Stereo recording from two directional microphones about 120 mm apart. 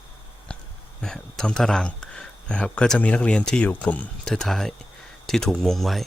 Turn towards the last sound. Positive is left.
turn(degrees=0)  # may be behind; listen again after turning